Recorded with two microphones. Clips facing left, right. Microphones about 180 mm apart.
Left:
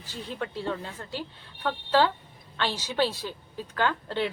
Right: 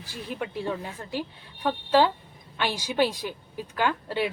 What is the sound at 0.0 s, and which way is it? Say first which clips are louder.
Speech: right 1 dB; 10° right (ahead or behind).